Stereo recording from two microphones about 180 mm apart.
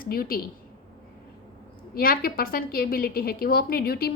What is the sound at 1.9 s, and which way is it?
A woman's voice, 55° left (ahead or behind).